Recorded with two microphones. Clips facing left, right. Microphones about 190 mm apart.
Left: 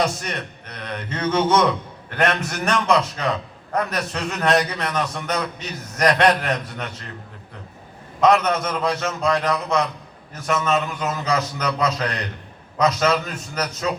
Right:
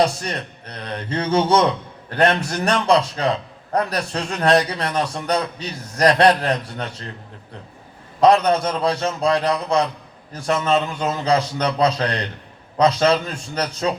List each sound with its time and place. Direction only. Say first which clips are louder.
0.0 s speech: right 3 dB; 30° right (ahead or behind)
8.2 s speech: right 3 dB; 30° right (ahead or behind)